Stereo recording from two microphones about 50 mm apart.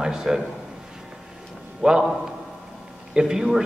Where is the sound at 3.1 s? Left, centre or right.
Centre.